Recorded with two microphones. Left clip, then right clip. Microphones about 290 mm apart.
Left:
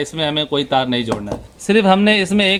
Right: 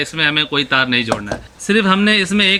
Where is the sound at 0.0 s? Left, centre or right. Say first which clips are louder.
Right 3 dB; centre.